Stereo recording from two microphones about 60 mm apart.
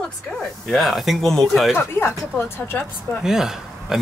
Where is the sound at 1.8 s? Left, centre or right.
Left.